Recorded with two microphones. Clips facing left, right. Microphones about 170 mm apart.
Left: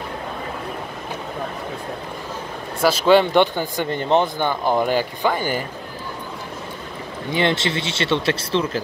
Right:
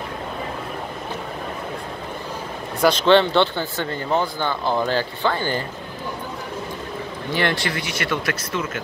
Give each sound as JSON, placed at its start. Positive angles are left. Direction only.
{"t": 2.8, "sound": "speech", "side_deg": 5}
{"t": 7.3, "sound": "speech", "side_deg": 20}